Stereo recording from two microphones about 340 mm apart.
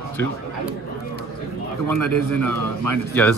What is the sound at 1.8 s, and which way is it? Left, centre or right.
A man's voice, right.